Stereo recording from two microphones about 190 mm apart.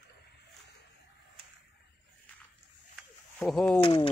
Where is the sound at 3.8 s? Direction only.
25° left (ahead or behind).